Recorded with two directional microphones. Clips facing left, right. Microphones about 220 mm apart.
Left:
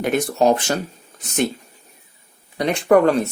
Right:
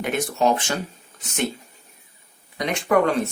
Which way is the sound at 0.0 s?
40° left (ahead or behind).